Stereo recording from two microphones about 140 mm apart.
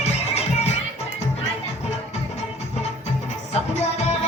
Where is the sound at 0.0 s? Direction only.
55° left (ahead or behind).